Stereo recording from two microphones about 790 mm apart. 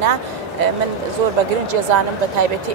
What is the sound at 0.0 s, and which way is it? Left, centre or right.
Speech, right.